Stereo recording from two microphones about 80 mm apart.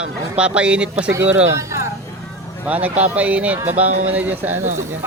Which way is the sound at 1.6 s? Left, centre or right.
Right.